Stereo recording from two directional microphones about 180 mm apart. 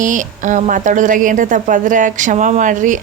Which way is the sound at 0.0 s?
45° right (ahead or behind).